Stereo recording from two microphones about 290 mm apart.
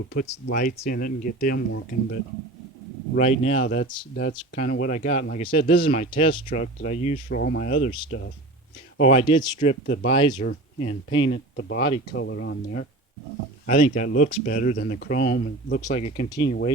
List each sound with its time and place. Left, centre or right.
0.1 s speech: left
3.2 s speech: left
7.3 s speech: left
9.0 s speech: left
10.4 s speech: left
13.7 s speech: left
15.9 s speech: left
16.4 s speech: left